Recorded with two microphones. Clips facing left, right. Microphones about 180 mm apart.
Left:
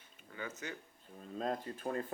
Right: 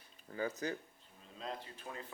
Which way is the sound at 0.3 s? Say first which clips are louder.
Right 6 dB; 35° right (ahead or behind).